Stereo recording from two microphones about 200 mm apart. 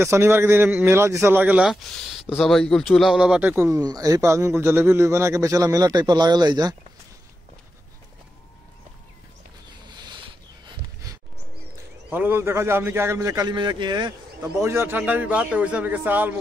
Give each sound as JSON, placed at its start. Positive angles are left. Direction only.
{"t": 0.0, "sound": "speech", "side_deg": -15}
{"t": 9.8, "sound": "a sound", "side_deg": -20}
{"t": 12.1, "sound": "speech", "side_deg": -10}